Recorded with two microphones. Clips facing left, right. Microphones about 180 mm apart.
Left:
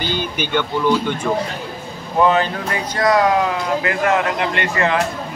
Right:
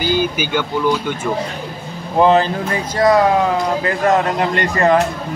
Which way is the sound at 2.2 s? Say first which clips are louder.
Right 4 dB; 30° right (ahead or behind).